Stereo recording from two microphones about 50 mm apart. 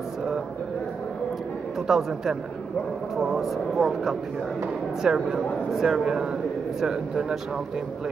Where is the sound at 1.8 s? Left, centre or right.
Centre.